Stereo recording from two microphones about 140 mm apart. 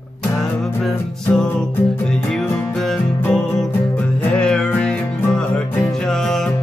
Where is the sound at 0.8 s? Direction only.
5° left (ahead or behind).